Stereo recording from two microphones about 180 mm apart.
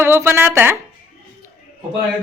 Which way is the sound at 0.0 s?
15° right (ahead or behind).